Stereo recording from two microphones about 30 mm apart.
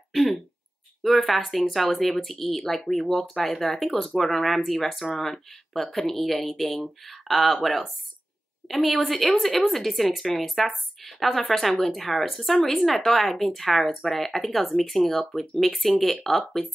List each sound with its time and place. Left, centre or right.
0.1 s speech: centre
8.6 s speech: centre